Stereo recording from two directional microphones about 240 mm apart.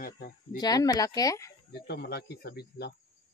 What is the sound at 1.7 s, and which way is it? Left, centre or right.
Speech, left.